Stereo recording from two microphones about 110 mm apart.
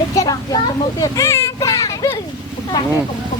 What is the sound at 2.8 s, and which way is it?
Speech, 35° left (ahead or behind).